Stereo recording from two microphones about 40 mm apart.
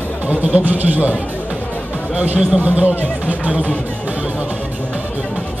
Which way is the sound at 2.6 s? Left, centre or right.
Right.